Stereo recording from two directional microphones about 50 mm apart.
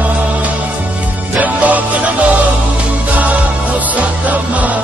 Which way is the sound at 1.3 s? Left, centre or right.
Right.